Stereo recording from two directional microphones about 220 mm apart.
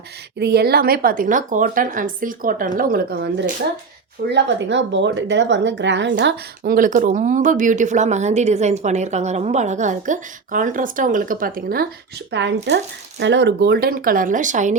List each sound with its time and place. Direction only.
0.3 s speech: 50° right (ahead or behind)
6.7 s speech: 35° right (ahead or behind)
12.3 s speech: 50° right (ahead or behind); by 14.8 s 35° right (ahead or behind)